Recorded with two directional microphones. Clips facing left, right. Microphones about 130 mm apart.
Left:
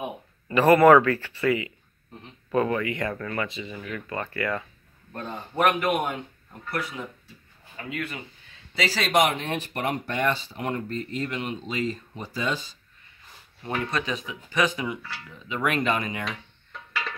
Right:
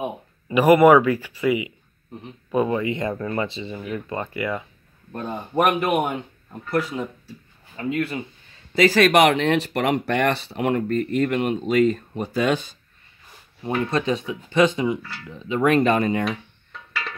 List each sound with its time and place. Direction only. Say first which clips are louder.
0.5 s speech: right 2 dB; 15° right (ahead or behind)
6.7 s speech: right 8 dB; 30° right (ahead or behind)
8.7 s speech: right 7 dB; 50° right (ahead or behind)
13.8 s speech: right 6 dB; 25° right (ahead or behind)